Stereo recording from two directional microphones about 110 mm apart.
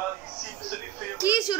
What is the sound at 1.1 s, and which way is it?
Speech, 30° left (ahead or behind).